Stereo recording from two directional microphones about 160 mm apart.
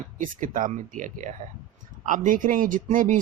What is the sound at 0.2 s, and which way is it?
Speech, 55° right (ahead or behind).